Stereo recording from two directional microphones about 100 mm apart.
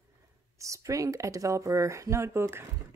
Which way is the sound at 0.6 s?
30° right (ahead or behind).